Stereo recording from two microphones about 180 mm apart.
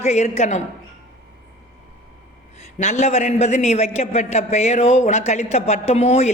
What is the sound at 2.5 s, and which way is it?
A man's voice, 40° left (ahead or behind).